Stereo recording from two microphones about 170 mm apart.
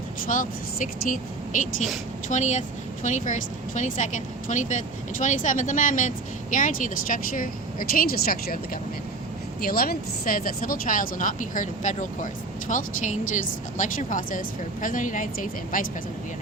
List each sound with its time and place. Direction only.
0.3 s a woman's voice: 50° left (ahead or behind)